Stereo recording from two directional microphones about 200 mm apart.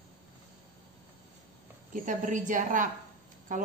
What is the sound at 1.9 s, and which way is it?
A woman's voice, 40° right (ahead or behind).